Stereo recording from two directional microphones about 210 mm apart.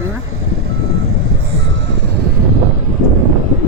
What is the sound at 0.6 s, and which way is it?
Vehicle, 85° right.